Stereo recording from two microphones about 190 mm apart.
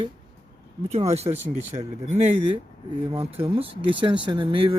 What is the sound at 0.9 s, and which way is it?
Speech, 35° right (ahead or behind).